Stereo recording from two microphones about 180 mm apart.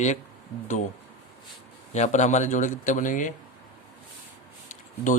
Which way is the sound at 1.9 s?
40° left (ahead or behind).